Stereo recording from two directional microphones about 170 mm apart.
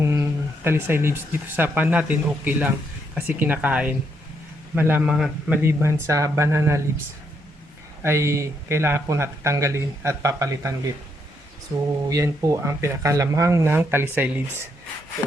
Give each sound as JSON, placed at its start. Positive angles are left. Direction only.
{"t": 0.0, "sound": "speech", "side_deg": -15}
{"t": 5.6, "sound": "speech", "side_deg": -15}
{"t": 8.0, "sound": "speech", "side_deg": -15}
{"t": 12.0, "sound": "speech", "side_deg": -20}